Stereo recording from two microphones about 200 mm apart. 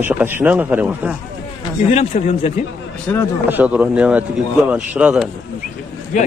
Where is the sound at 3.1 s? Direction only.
15° left (ahead or behind).